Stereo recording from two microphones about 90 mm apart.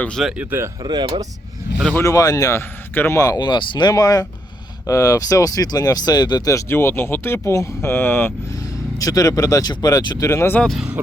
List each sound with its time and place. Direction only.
0.3 s speech: 25° right (ahead or behind)
0.8 s speech: 55° right (ahead or behind)
2.0 s speech: 40° left (ahead or behind)
2.6 s speech: 25° left (ahead or behind)
3.2 s speech: 45° left (ahead or behind)
6.5 s speech: 30° left (ahead or behind)
9.0 s speech: 40° left (ahead or behind)
10.2 s speech: 35° left (ahead or behind)